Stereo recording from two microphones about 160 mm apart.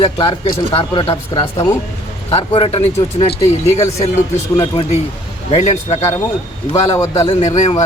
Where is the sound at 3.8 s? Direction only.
20° left (ahead or behind).